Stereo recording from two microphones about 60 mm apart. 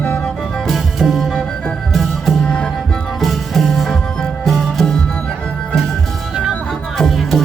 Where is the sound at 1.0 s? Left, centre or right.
Centre.